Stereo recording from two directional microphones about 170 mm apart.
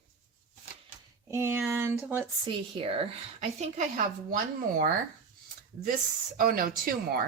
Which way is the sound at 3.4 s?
45° right (ahead or behind).